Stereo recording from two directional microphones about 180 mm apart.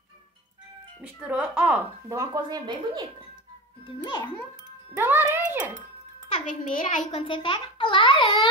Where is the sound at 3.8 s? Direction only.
25° left (ahead or behind).